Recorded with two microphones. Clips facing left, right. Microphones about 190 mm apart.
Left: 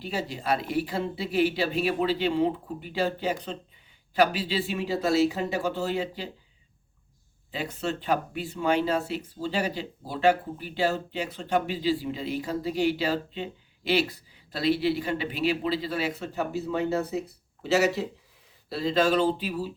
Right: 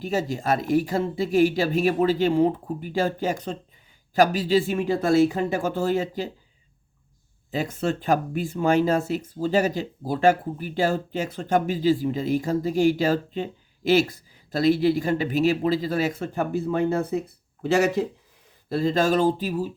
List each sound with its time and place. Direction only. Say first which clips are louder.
0.0 s speech: right 6 dB; 45° right (ahead or behind)
7.5 s speech: right 5 dB; 45° right (ahead or behind)